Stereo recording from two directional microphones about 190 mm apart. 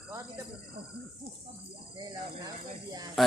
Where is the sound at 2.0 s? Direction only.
20° right (ahead or behind).